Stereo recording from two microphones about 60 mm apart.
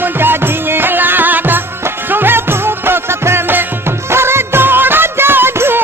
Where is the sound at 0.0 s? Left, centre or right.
Right.